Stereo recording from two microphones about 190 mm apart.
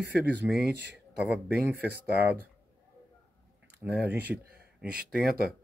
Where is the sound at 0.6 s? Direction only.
60° right (ahead or behind).